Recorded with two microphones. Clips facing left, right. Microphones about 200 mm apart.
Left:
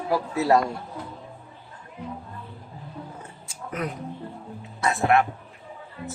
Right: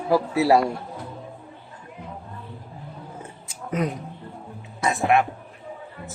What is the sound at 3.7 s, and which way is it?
A man's voice, 20° right (ahead or behind).